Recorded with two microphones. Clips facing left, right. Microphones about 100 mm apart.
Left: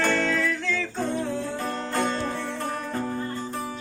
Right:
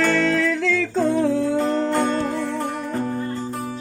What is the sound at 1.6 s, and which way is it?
Music, 20° right (ahead or behind).